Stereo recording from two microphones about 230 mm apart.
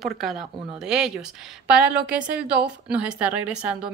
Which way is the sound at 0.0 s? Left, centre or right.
Centre.